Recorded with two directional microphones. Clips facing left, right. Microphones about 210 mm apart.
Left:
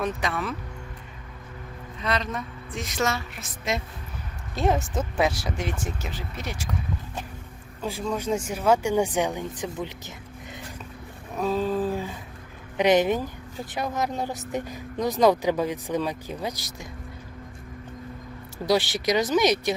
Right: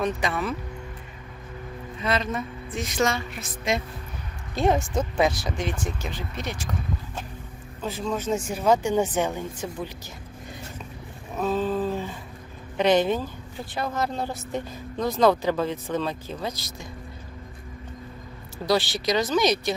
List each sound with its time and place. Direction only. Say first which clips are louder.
0.0 s a woman's voice: right 2 dB; centre (ahead or behind)
2.0 s a woman's voice: right 2 dB; 5° right (ahead or behind)
7.8 s a woman's voice: even; 10° left (ahead or behind)
11.4 s a sound: even; 10° left (ahead or behind)
12.7 s a woman's voice: even; 15° left (ahead or behind)
18.6 s speech: left 1 dB; 20° left (ahead or behind)